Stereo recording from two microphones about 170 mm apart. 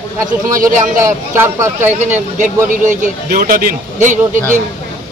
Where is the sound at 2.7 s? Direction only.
50° right (ahead or behind).